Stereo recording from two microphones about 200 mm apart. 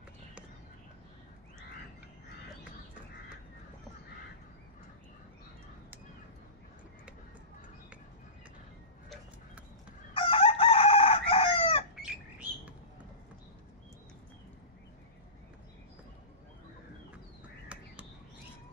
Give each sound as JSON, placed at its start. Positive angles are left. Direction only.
{"t": 10.1, "sound": "chicken", "side_deg": 25}
{"t": 11.9, "sound": "bird", "side_deg": -5}
{"t": 17.7, "sound": "a sound", "side_deg": -5}